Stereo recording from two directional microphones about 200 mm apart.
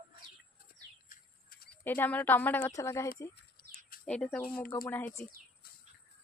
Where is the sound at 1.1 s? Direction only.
45° left (ahead or behind).